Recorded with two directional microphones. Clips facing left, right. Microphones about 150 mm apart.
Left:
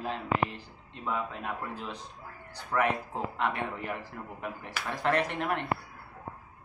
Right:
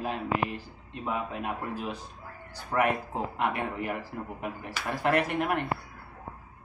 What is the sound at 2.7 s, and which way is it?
Speech, 20° right (ahead or behind).